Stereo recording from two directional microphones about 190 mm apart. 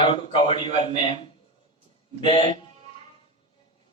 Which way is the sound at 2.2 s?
25° left (ahead or behind).